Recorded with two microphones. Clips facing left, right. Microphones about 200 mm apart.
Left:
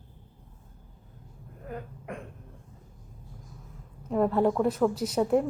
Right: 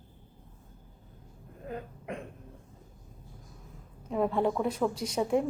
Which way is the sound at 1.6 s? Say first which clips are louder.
Even; 20° right (ahead or behind).